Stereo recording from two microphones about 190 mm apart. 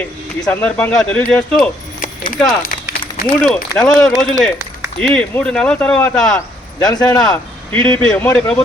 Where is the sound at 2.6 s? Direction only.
50° left (ahead or behind).